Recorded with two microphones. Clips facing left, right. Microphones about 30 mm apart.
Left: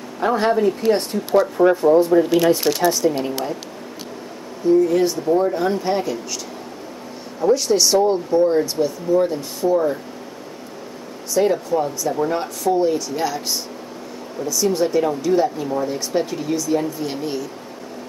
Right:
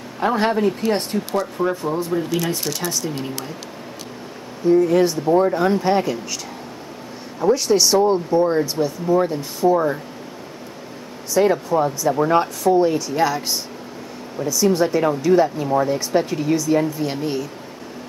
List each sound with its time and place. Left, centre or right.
0.2 s speech: centre
1.3 s speech: centre
2.2 s speech: left
2.8 s speech: centre
4.6 s speech: centre
7.3 s speech: centre
11.3 s speech: centre
12.6 s speech: centre